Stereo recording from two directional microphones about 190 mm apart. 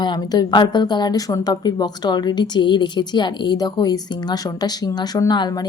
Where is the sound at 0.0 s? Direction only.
20° left (ahead or behind).